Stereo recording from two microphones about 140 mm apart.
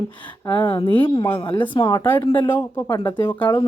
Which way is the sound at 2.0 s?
20° left (ahead or behind).